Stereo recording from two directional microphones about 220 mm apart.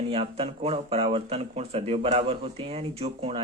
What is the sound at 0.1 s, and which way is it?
Speech, 25° right (ahead or behind).